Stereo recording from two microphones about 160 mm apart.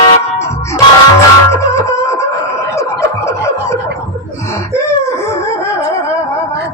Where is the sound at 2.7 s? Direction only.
20° left (ahead or behind).